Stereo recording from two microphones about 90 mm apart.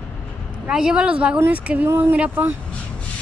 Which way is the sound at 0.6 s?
10° right (ahead or behind).